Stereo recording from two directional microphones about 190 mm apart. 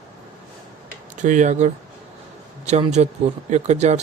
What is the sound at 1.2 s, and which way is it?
Speech, 40° right (ahead or behind).